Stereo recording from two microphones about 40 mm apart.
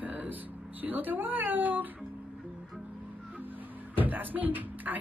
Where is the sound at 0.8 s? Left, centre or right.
Right.